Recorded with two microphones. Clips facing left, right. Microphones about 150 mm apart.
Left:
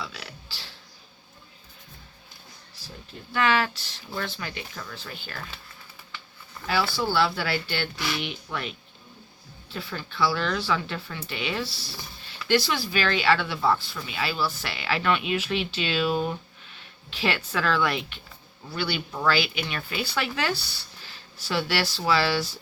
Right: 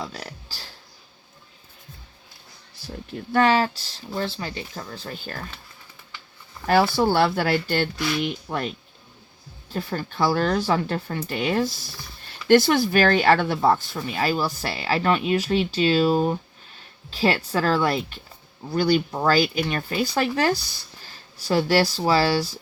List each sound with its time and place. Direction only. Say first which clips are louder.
0.0 s music: right 4 dB; 40° right (ahead or behind)
3.3 s speech: right 5 dB; 35° right (ahead or behind)
6.9 s speech: right 5 dB; 50° right (ahead or behind); by 22.4 s 35° right (ahead or behind)